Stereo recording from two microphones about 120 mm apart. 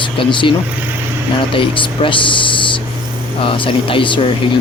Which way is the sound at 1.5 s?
45° left (ahead or behind).